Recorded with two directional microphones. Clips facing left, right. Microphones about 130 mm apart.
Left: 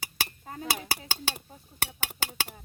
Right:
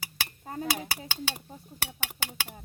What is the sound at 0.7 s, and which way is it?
Speech, 40° left (ahead or behind).